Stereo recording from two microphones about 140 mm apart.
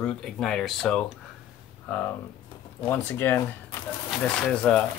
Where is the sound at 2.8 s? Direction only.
15° left (ahead or behind).